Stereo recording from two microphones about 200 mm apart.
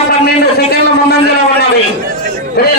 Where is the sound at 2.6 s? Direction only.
55° left (ahead or behind).